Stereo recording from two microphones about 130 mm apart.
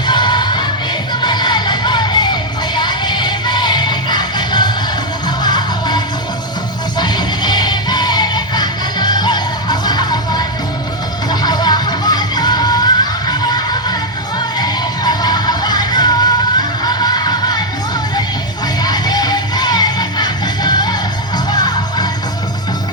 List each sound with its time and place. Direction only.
0.1 s music: 35° left (ahead or behind)
7.0 s music: 35° left (ahead or behind)
18.8 s music: 30° left (ahead or behind)